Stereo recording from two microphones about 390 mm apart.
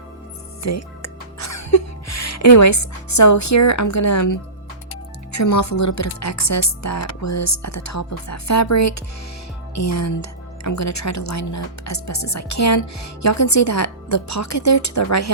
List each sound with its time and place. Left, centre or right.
0.6 s speech: left